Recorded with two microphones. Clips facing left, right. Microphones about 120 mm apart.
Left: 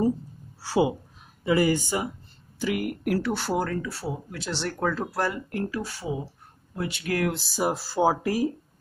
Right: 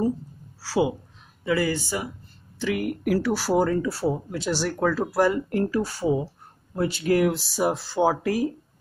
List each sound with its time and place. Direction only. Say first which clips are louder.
0.6 s a sound: even; 20° left (ahead or behind)
1.4 s speech: left 2 dB; 15° left (ahead or behind)
2.6 s speech: right 2 dB; 5° left (ahead or behind)
3.5 s speech: right 6 dB; 20° right (ahead or behind)
4.5 s speech: right 4 dB; 5° right (ahead or behind)
5.3 s speech: right 6 dB; 35° right (ahead or behind)
7.2 s speech: right 3 dB; centre (ahead or behind)